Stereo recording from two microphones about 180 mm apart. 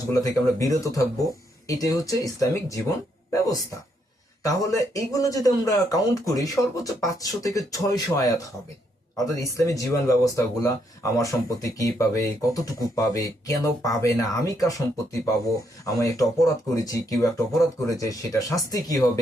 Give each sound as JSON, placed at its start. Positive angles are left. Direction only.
{"t": 0.1, "sound": "speech", "side_deg": 20}